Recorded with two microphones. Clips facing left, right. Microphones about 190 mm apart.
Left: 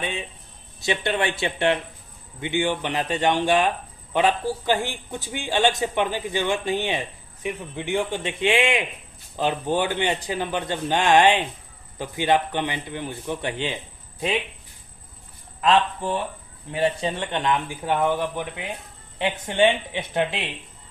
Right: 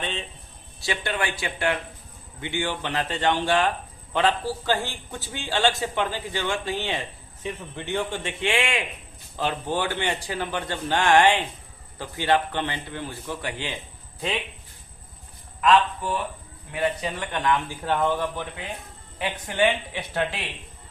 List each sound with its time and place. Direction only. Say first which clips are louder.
0.0 s a man's voice: left 2 dB; 10° left (ahead or behind)
0.8 s a man's voice: left 4 dB; 20° left (ahead or behind)
15.6 s speech: even; 30° left (ahead or behind)
19.2 s speech: left 3 dB; 25° left (ahead or behind)